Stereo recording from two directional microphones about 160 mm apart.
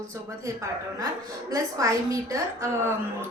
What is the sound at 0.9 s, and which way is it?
A woman's voice, 20° right (ahead or behind).